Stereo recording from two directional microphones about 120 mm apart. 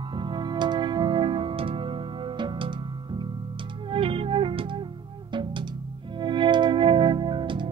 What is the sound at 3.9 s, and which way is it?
Music, 50° right (ahead or behind).